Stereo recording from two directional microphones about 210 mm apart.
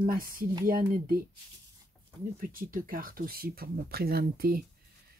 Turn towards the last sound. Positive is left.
turn(degrees=-45)  # may be behind; listen again after turning